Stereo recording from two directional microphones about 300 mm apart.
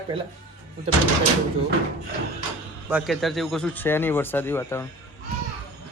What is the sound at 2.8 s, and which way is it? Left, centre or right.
A man's voice, centre.